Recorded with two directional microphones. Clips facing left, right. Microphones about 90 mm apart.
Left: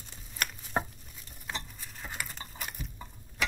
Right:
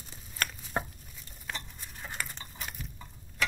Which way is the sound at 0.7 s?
15° left (ahead or behind).